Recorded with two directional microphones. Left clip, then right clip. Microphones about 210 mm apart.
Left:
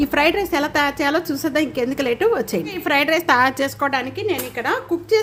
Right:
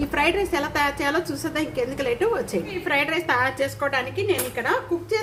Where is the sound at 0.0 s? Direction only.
40° left (ahead or behind).